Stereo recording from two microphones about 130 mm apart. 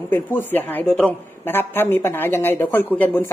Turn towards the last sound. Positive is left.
turn(degrees=15)  # may be behind; listen again after turning